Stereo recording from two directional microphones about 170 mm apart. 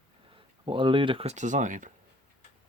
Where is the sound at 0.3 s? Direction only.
30° right (ahead or behind); by 1.9 s 50° right (ahead or behind).